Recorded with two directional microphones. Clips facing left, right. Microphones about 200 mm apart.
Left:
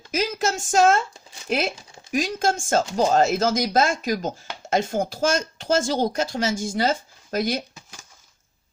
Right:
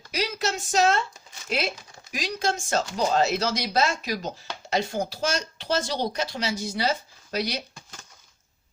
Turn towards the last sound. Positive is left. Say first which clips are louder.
# left 5 dB
turn(degrees=50)  # may be behind; listen again after turning